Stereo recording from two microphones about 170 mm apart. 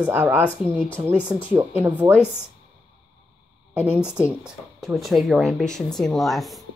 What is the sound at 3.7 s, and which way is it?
Speech, 5° right (ahead or behind).